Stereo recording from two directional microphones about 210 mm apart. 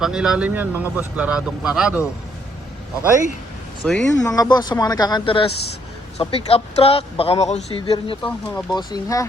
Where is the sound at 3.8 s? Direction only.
5° left (ahead or behind).